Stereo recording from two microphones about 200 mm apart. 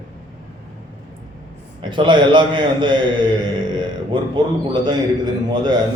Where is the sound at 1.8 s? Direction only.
25° right (ahead or behind).